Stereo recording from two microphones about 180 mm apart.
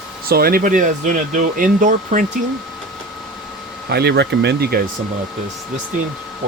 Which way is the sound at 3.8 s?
65° right (ahead or behind).